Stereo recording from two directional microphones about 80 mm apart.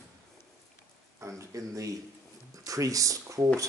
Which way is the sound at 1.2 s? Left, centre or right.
Right.